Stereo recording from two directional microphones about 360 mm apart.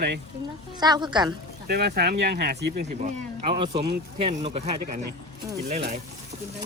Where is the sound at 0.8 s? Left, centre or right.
Centre.